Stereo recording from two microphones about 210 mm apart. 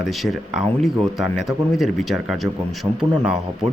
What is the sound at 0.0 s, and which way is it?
Speech, centre (ahead or behind).